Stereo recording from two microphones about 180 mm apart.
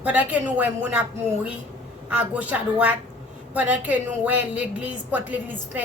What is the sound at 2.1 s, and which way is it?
A woman's voice, 5° right (ahead or behind).